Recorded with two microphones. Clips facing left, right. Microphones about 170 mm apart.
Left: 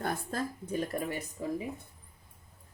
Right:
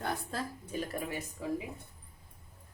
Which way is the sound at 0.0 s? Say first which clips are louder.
Left 3 dB; 45° left (ahead or behind).